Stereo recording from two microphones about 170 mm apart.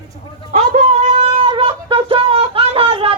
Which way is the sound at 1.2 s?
35° right (ahead or behind).